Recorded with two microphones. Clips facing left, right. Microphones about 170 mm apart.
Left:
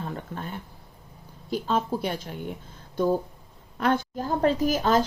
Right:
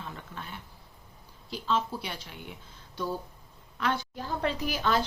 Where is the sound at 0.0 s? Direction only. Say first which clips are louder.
Left 8 dB; 45° left (ahead or behind).